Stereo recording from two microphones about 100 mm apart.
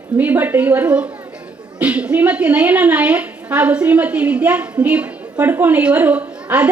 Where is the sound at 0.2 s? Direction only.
15° right (ahead or behind).